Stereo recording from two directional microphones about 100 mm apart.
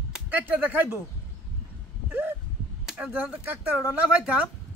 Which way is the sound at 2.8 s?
10° right (ahead or behind).